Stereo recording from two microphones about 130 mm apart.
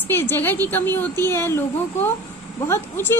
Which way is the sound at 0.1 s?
15° left (ahead or behind).